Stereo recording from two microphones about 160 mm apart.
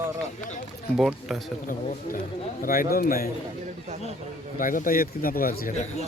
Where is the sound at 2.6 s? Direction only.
65° left (ahead or behind).